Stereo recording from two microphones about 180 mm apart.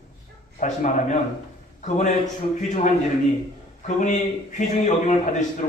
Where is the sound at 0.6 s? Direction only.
45° left (ahead or behind).